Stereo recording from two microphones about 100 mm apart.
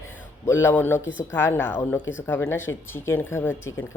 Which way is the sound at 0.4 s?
25° left (ahead or behind).